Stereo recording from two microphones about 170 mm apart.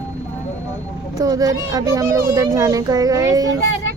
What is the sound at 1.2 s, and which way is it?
A child's voice, 20° right (ahead or behind).